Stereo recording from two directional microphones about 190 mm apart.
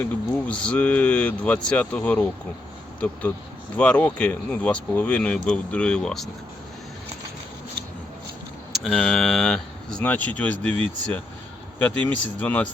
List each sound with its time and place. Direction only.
0.0 s speech: 5° left (ahead or behind)
8.7 s speech: centre (ahead or behind)